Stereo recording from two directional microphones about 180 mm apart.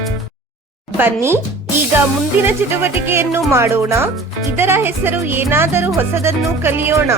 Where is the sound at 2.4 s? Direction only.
10° right (ahead or behind).